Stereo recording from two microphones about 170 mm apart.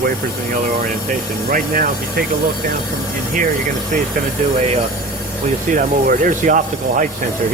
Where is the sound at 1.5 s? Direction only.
55° right (ahead or behind).